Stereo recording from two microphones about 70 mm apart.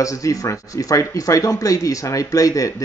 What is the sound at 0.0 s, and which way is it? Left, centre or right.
Speech, left.